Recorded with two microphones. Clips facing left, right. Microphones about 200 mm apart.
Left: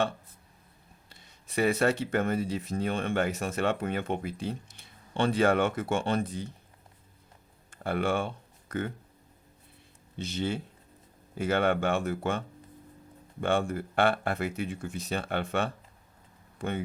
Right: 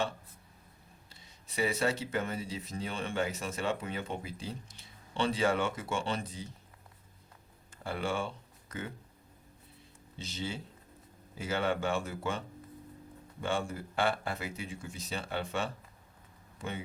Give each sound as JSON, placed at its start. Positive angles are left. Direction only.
{"t": 1.1, "sound": "speech", "side_deg": 55}
{"t": 7.7, "sound": "speech", "side_deg": 60}
{"t": 10.2, "sound": "speech", "side_deg": 55}
{"t": 13.4, "sound": "speech", "side_deg": 55}